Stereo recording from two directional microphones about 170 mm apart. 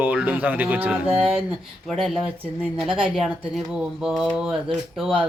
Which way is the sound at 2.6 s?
5° right (ahead or behind).